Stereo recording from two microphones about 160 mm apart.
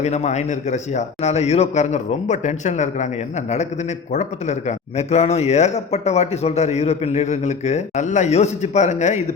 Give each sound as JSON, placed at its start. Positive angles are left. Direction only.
{"t": 0.0, "sound": "a man's voice", "side_deg": 45}